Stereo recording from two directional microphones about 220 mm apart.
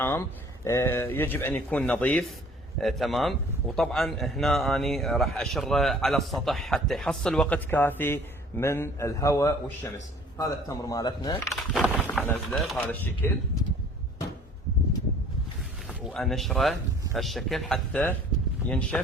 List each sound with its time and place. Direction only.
0.0 s a man's voice: 10° left (ahead or behind)
11.4 s speech: centre (ahead or behind)
15.9 s a man's voice: centre (ahead or behind)